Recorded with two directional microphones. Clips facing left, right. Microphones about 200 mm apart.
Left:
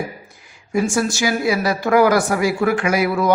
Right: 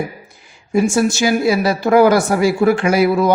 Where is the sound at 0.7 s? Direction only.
25° right (ahead or behind).